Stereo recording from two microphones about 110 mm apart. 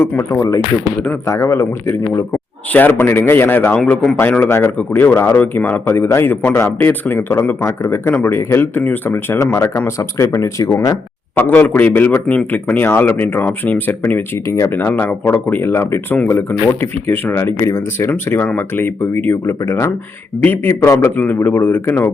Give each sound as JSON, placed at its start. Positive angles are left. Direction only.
{"t": 0.0, "sound": "speech", "side_deg": 25}
{"t": 11.3, "sound": "speech", "side_deg": 20}